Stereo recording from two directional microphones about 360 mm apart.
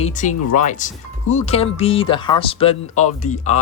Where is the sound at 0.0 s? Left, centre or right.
Centre.